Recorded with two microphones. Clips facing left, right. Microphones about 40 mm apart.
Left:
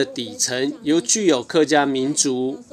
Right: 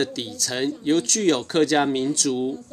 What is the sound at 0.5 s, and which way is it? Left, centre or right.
Speech, centre.